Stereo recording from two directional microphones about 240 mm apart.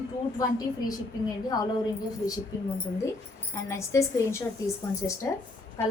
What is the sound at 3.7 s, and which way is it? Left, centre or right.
A woman's voice, centre.